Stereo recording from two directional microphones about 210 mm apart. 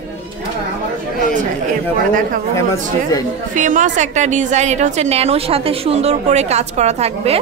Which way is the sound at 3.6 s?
35° right (ahead or behind).